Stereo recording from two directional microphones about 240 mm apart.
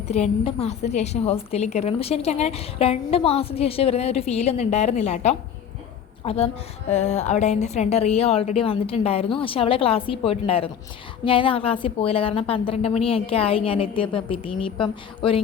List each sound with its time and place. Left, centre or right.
0.1 s a woman's voice: left